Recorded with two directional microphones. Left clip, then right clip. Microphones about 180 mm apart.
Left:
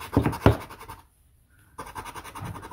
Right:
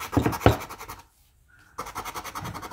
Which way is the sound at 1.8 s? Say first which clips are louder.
Right 4 dB; 10° right (ahead or behind).